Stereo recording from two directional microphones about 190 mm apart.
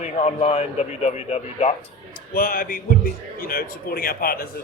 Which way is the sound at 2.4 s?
50° left (ahead or behind).